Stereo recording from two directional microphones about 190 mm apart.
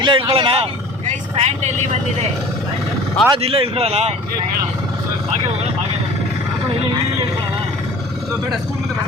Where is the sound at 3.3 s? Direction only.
30° right (ahead or behind).